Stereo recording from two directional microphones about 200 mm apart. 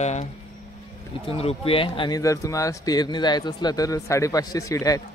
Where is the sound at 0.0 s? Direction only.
35° left (ahead or behind).